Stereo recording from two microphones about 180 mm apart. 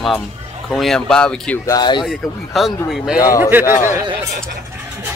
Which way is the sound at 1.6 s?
25° left (ahead or behind).